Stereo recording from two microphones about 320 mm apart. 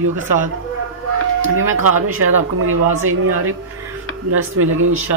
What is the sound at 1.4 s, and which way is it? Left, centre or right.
Speech, right.